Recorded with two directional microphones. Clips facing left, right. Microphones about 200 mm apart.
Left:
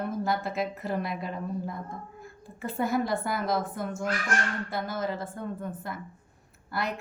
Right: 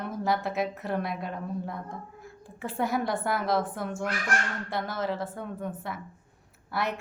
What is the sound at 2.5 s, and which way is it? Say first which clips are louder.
Speech: even; 80° right.